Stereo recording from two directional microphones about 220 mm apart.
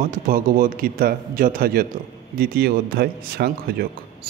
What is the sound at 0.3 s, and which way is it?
A man's voice, 40° right (ahead or behind).